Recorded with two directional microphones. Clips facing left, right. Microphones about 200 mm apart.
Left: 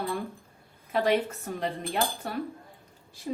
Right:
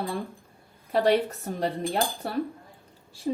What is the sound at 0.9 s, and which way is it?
Speech, 35° right (ahead or behind).